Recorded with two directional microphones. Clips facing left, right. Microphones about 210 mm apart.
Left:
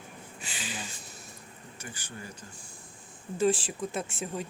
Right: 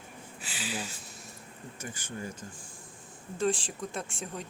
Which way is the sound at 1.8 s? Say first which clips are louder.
Right 2 dB; 50° right (ahead or behind).